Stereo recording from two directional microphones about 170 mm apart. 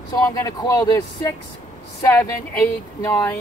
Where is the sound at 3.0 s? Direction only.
15° left (ahead or behind).